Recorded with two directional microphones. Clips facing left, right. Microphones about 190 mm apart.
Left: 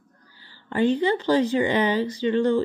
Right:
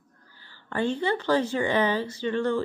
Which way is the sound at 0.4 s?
15° left (ahead or behind).